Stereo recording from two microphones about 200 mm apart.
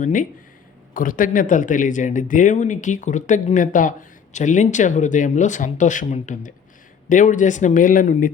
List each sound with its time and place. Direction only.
0.0 s speech: 40° left (ahead or behind)